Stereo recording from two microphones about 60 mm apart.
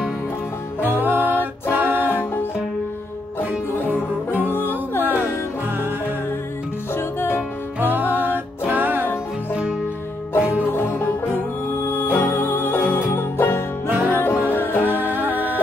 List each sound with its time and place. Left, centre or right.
0.7 s music: right
5.0 s music: right
6.9 s music: left
7.8 s music: right
10.7 s music: left
13.8 s music: right
14.5 s music: left
14.9 s music: right